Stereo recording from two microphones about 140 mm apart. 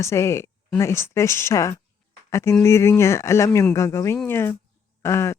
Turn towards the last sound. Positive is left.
turn(degrees=20)  # may be behind; listen again after turning